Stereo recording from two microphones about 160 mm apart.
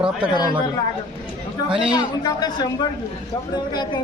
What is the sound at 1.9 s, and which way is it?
A man's voice, 25° left (ahead or behind).